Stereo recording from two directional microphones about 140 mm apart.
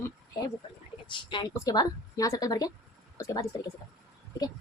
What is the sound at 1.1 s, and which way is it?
A woman's voice, 35° left (ahead or behind).